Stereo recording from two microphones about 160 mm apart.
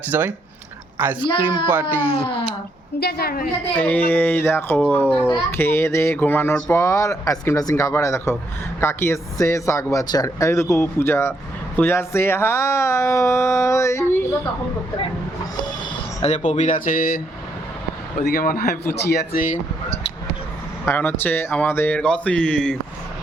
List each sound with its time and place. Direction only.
0.1 s speech: 10° right (ahead or behind)
1.2 s speech: 30° left (ahead or behind)
1.6 s speech: 15° right (ahead or behind)
2.0 s speech: 35° left (ahead or behind)
3.0 s a man's voice: 80° left
3.8 s speech: 10° left (ahead or behind)
16.2 s speech: 45° left (ahead or behind)
18.3 s a man's voice: 60° left (ahead or behind); by 19.5 s 80° left
20.8 s speech: 10° left (ahead or behind)